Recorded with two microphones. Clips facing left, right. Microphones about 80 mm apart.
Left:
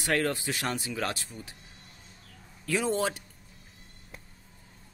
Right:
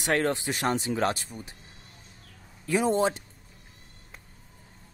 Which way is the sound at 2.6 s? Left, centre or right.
Right.